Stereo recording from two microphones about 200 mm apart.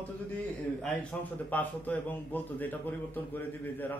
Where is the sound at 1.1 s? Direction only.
5° left (ahead or behind).